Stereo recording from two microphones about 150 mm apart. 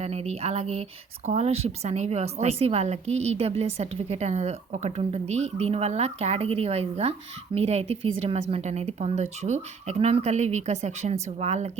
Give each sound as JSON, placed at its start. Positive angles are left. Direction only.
{"t": 0.0, "sound": "speech", "side_deg": -45}